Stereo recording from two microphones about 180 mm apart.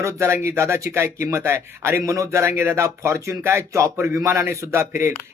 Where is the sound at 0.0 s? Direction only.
15° right (ahead or behind).